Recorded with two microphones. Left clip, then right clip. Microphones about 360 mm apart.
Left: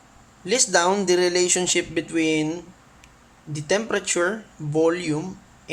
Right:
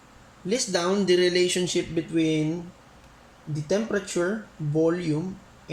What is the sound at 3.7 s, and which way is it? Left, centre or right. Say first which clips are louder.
Speech: left 3 dB; left.